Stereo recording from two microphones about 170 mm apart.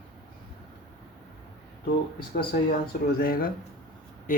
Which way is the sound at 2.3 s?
65° left (ahead or behind).